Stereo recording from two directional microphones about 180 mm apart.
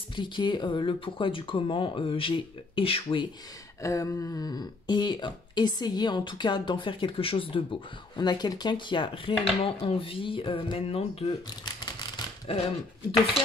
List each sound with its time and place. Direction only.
0.1 s speech: 25° left (ahead or behind)
3.8 s speech: 15° left (ahead or behind); by 12.6 s 35° left (ahead or behind)